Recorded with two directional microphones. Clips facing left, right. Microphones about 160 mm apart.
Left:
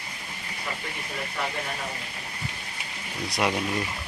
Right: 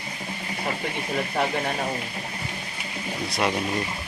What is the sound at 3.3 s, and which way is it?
Speech, 10° left (ahead or behind).